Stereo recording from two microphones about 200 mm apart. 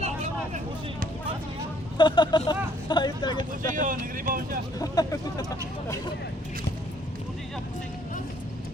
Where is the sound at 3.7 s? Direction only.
40° right (ahead or behind).